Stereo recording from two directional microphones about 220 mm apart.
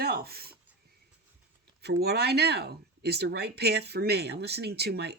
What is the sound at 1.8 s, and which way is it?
Speech, 45° right (ahead or behind).